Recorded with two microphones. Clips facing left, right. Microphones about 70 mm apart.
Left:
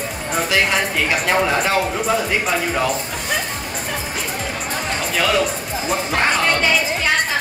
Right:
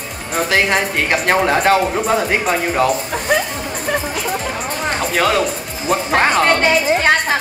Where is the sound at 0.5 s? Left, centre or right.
Right.